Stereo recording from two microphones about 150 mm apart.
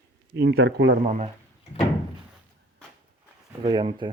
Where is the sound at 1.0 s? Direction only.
55° right (ahead or behind).